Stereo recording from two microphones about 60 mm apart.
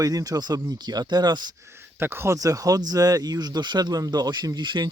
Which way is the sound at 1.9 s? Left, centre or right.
Right.